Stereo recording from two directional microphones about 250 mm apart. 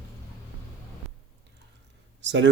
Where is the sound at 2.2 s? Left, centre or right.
Right.